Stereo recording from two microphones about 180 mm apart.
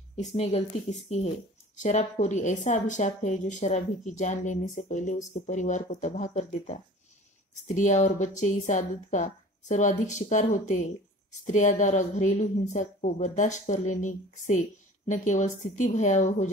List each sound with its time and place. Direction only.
0.1 s speech: 35° left (ahead or behind)